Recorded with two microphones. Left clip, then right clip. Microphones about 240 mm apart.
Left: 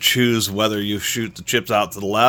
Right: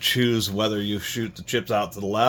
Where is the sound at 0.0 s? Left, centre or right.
Left.